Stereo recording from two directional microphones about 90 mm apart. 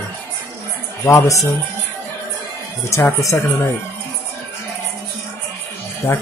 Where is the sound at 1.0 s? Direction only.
35° left (ahead or behind).